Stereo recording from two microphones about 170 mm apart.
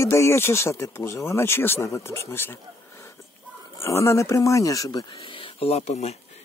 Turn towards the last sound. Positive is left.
turn(degrees=40)  # may be behind; listen again after turning